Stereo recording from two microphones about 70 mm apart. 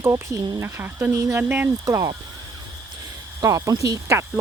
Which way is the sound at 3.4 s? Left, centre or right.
Right.